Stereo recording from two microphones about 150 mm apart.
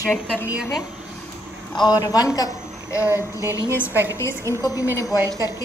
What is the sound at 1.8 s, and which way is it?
A man's voice, 25° left (ahead or behind).